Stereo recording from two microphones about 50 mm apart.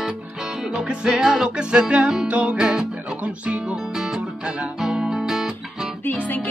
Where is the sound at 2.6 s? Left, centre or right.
Centre.